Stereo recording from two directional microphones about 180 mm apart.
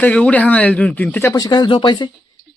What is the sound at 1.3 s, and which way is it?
Speech, 20° left (ahead or behind).